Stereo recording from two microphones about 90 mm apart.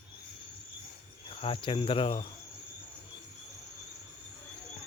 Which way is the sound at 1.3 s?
90° left.